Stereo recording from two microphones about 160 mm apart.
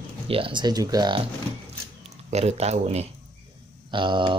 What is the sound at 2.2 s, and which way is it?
Speech, 45° right (ahead or behind).